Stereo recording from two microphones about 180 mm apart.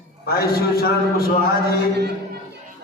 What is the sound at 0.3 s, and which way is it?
A man's voice, 55° left (ahead or behind).